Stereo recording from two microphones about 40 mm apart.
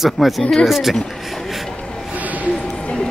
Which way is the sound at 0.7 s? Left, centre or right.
Centre.